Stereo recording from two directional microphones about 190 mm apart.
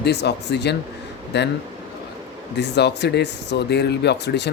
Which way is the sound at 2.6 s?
65° left (ahead or behind).